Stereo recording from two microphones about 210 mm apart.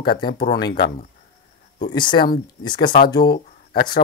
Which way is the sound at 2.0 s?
20° left (ahead or behind).